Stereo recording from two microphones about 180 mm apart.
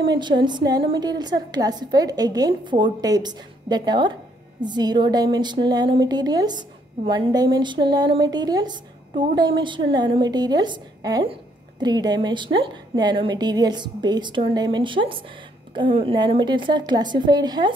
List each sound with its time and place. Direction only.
0.0 s a woman's voice: 25° right (ahead or behind)